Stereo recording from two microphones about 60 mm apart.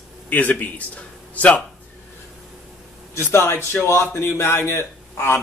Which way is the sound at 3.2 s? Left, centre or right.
Left.